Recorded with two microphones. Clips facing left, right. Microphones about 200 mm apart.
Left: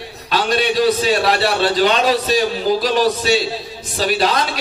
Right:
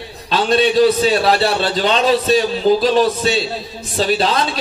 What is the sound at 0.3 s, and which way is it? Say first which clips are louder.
Speech: right 3 dB; 25° right (ahead or behind).